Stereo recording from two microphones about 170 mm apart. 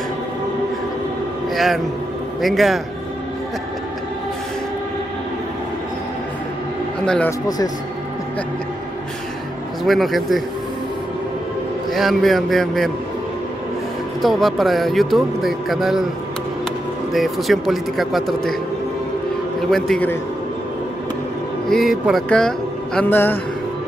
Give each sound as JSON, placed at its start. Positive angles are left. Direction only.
{"t": 1.5, "sound": "a man's voice", "side_deg": 0}
{"t": 7.2, "sound": "speech", "side_deg": 20}
{"t": 9.8, "sound": "speech", "side_deg": 0}
{"t": 11.9, "sound": "speech", "side_deg": 0}
{"t": 14.2, "sound": "speech", "side_deg": 0}
{"t": 17.1, "sound": "speech", "side_deg": 0}
{"t": 19.7, "sound": "speech", "side_deg": 5}
{"t": 21.6, "sound": "speech", "side_deg": 0}
{"t": 22.9, "sound": "a man's voice", "side_deg": 10}